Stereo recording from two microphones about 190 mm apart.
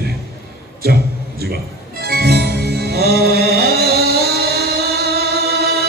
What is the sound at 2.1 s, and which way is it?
Music, 55° right (ahead or behind).